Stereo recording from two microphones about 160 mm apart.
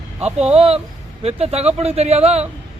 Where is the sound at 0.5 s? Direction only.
35° right (ahead or behind).